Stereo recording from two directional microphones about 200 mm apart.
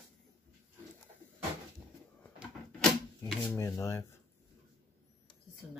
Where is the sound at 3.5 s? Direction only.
15° left (ahead or behind).